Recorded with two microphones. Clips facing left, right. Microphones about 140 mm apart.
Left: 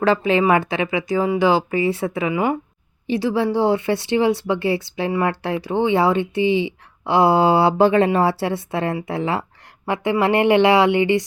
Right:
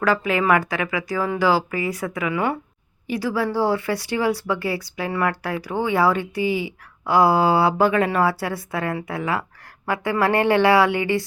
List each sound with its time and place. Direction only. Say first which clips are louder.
0.0 s speech: left 4 dB; 25° left (ahead or behind)